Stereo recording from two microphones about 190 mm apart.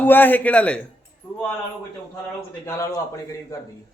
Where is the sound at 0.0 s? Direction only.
10° left (ahead or behind).